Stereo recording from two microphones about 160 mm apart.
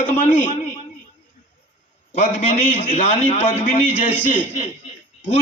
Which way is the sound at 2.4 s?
40° left (ahead or behind).